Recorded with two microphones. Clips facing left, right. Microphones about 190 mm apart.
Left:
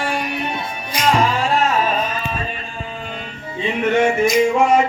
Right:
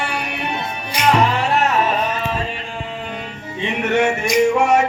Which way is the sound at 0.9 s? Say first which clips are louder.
Right 1 dB; 65° right (ahead or behind).